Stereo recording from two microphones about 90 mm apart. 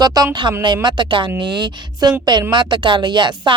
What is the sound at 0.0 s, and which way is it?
Speech, 45° right (ahead or behind).